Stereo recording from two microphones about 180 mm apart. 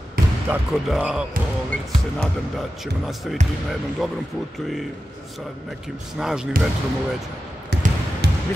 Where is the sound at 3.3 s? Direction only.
Centre (ahead or behind).